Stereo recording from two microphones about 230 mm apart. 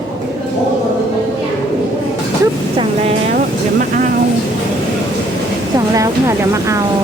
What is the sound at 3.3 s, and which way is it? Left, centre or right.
Music, right.